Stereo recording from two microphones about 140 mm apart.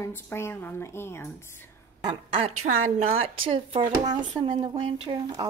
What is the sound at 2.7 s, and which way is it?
Speech, 55° right (ahead or behind).